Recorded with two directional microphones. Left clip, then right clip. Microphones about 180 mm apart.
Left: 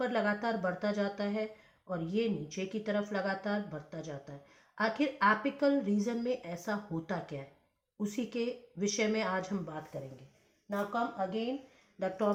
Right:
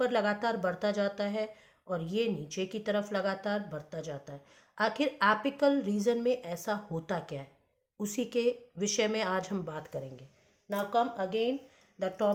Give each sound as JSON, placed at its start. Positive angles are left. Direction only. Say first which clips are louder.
{"t": 0.0, "sound": "speech", "louder": "right 3 dB", "side_deg": -35}
{"t": 11.9, "sound": "speech", "louder": "right 2 dB", "side_deg": -25}